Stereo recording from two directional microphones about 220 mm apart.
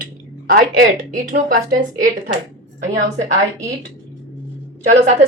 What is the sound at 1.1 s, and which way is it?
Speech, 40° right (ahead or behind).